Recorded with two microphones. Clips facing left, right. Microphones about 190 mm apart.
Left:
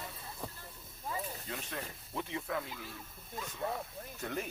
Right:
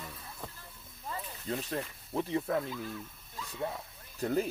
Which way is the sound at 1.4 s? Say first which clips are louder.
Right 7 dB; 35° right (ahead or behind).